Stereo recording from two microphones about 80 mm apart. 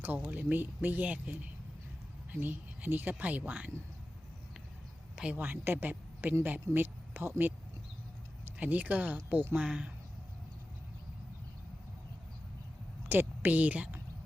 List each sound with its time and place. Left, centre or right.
0.2 s speech: centre
5.1 s speech: centre
13.1 s a woman's voice: right